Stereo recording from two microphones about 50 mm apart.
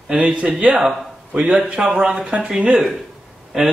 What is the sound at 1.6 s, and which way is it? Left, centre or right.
Speech, centre.